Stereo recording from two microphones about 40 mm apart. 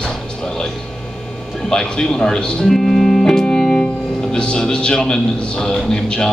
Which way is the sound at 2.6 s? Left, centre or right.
Centre.